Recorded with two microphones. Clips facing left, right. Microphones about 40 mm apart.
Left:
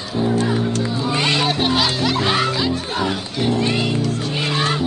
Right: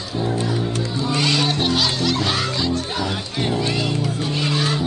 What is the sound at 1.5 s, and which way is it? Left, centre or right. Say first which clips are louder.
Music: left 2 dB; centre.